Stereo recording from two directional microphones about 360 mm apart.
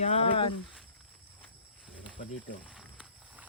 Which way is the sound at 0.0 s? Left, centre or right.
Centre.